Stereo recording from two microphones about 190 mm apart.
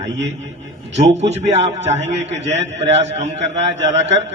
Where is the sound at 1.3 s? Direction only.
35° right (ahead or behind).